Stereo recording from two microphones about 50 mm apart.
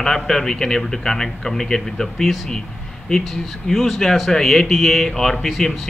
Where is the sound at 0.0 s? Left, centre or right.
Centre.